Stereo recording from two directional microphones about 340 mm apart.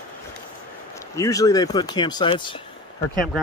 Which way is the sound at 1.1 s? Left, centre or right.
Centre.